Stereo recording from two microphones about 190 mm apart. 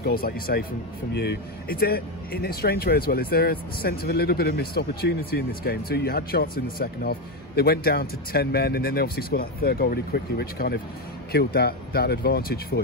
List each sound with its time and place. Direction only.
0.0 s speech: 50° left (ahead or behind)